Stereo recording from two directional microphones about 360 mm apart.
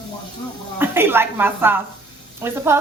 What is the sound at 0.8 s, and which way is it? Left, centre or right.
Speech, centre.